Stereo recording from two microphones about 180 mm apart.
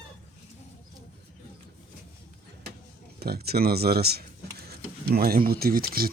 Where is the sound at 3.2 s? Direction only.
60° right (ahead or behind).